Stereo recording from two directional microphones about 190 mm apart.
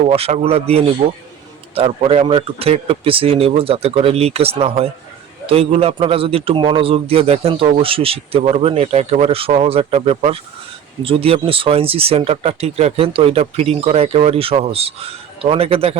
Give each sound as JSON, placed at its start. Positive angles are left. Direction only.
{"t": 0.0, "sound": "speech", "side_deg": -30}